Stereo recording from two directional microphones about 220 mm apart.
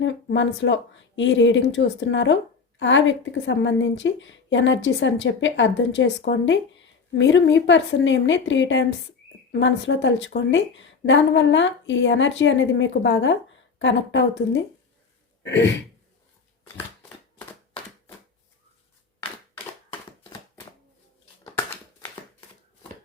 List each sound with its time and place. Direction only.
0.0 s speech: 55° left (ahead or behind)